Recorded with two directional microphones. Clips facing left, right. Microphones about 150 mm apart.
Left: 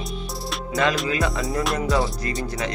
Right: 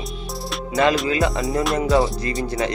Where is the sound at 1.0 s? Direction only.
25° right (ahead or behind).